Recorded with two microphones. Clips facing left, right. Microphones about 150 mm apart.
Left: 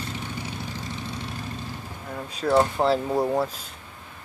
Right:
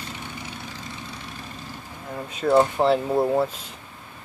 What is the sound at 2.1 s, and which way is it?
Speech, 5° right (ahead or behind).